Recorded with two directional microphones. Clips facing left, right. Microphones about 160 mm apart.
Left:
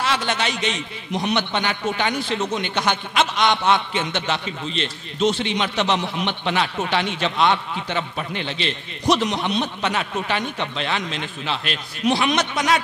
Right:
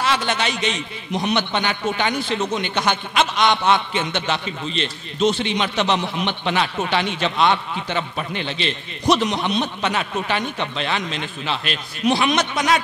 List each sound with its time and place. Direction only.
0.0 s a man's voice: 10° right (ahead or behind)